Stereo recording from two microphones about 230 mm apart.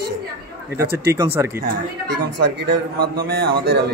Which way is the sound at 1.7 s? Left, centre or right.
Right.